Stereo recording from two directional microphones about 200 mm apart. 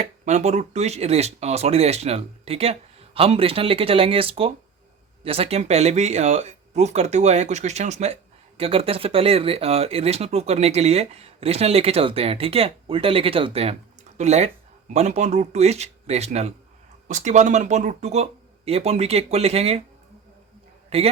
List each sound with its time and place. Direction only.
0.3 s speech: 35° right (ahead or behind)
20.9 s speech: 30° right (ahead or behind)